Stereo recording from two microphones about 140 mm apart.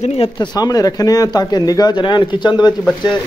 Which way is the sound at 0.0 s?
45° left (ahead or behind).